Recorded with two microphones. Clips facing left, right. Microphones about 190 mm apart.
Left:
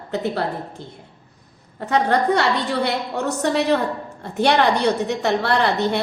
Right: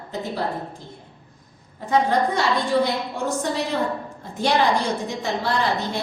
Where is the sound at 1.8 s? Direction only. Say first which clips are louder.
Left 1 dB; 70° left (ahead or behind).